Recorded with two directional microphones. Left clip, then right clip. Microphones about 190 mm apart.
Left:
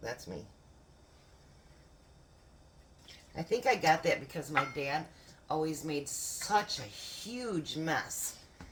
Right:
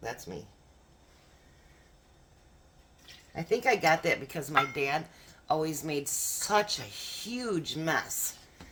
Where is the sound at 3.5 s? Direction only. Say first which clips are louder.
Right 3 dB; 40° right (ahead or behind).